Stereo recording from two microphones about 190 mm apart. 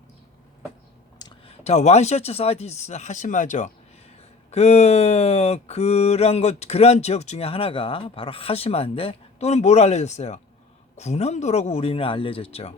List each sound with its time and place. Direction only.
1.2 s mantra: 35° left (ahead or behind)